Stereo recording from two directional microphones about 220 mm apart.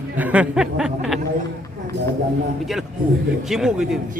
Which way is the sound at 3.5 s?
Centre (ahead or behind).